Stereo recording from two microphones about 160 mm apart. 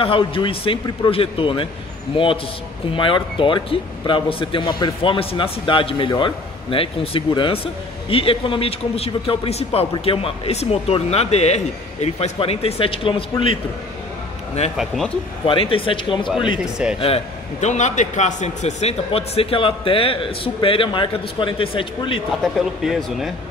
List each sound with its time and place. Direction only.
0.0 s speech: 35° left (ahead or behind)
14.8 s a man's voice: centre (ahead or behind)
15.4 s speech: 35° left (ahead or behind)
22.4 s a man's voice: centre (ahead or behind)